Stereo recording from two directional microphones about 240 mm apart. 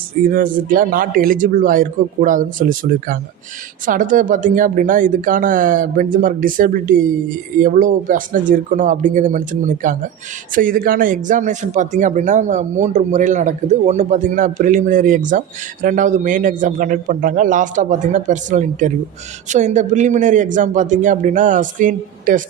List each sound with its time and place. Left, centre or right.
0.3 s speech: right